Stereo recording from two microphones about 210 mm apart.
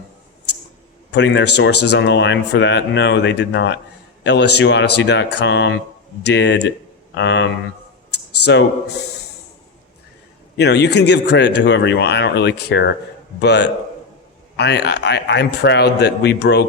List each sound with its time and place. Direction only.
1.1 s speech: 60° left (ahead or behind)
8.1 s a sound: 55° left (ahead or behind)
10.6 s speech: 55° left (ahead or behind)